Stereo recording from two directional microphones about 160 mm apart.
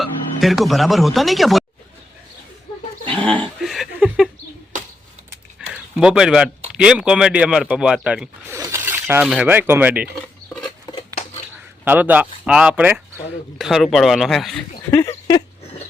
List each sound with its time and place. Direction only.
0.0 s speech: centre (ahead or behind)
3.2 s dog: 5° left (ahead or behind)
5.5 s a sound: 5° right (ahead or behind)
6.7 s speech: 5° right (ahead or behind)
8.5 s zipper: 20° right (ahead or behind)
9.2 s speech: 5° right (ahead or behind)
11.9 s speech: 10° right (ahead or behind)
14.8 s speech: 15° left (ahead or behind)